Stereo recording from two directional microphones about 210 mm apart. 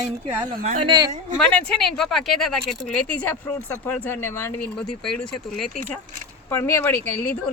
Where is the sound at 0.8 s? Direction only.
20° right (ahead or behind).